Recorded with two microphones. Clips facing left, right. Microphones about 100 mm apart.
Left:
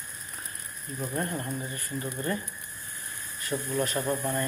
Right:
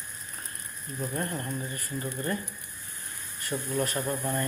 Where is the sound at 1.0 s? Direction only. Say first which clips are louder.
Left 1 dB; 20° left (ahead or behind).